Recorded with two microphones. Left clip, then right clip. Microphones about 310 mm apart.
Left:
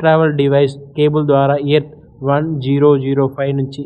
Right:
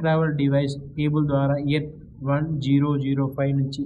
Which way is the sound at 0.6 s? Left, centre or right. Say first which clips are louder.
Left 14 dB; centre.